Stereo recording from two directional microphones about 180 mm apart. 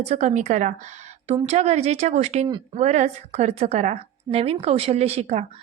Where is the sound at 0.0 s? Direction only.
35° right (ahead or behind).